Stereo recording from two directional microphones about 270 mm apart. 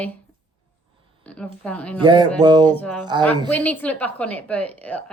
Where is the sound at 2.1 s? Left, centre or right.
Centre.